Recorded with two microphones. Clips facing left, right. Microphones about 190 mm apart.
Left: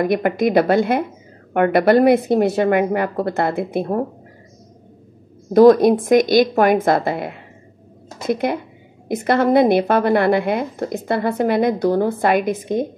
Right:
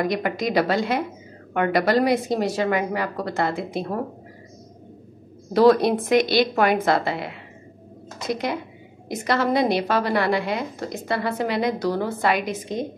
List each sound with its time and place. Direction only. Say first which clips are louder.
0.0 s speech: left 6 dB; 55° left (ahead or behind)
5.5 s speech: left 6 dB; 45° left (ahead or behind)